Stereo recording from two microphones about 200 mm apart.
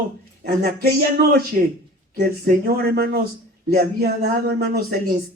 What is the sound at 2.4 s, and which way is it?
Speech, 50° right (ahead or behind).